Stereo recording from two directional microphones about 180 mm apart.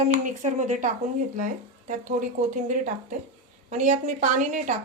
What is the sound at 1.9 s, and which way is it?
A woman's voice, 45° right (ahead or behind).